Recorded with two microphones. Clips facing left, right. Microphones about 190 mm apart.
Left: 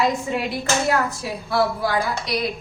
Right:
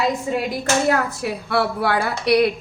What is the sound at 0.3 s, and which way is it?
Speech, 50° right (ahead or behind).